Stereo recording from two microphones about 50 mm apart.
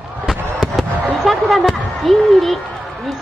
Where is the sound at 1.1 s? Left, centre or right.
Centre.